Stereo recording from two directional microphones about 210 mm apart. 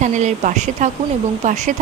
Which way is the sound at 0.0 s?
35° right (ahead or behind).